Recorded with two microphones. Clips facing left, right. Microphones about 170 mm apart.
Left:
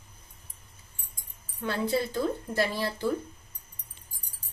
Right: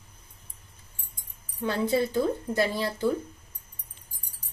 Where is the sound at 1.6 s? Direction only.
10° right (ahead or behind).